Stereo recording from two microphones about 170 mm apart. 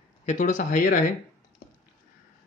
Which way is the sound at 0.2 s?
45° left (ahead or behind).